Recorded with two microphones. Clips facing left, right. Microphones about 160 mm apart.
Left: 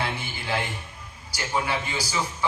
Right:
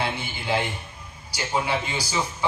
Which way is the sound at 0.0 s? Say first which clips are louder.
Right 2 dB; 25° right (ahead or behind).